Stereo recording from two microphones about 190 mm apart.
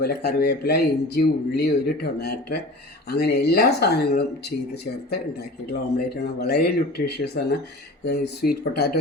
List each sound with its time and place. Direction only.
0.0 s speech: 55° left (ahead or behind)